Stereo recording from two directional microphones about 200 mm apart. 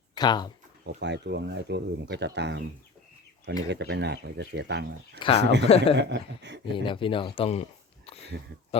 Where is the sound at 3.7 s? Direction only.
60° right (ahead or behind).